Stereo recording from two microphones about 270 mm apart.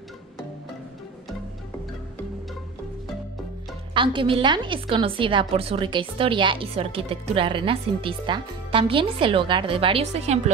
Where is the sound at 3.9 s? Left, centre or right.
Centre.